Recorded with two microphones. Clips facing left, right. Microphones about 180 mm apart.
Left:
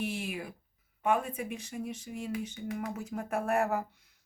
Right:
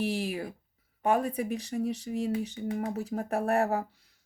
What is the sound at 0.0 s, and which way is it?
Speech, 35° right (ahead or behind).